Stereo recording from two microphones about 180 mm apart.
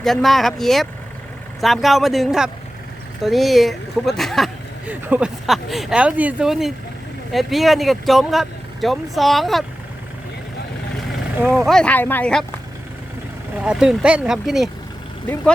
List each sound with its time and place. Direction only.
0.0 s speech: centre (ahead or behind)
11.4 s speech: centre (ahead or behind)
13.7 s speech: 5° right (ahead or behind)